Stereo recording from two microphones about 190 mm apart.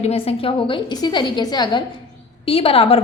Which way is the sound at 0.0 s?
30° left (ahead or behind).